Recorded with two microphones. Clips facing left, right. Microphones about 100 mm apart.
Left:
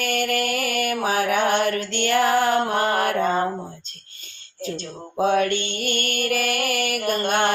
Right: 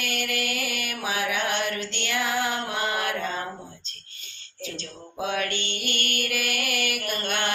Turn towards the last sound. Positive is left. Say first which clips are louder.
# left 8 dB
turn(degrees=45)  # may be behind; listen again after turning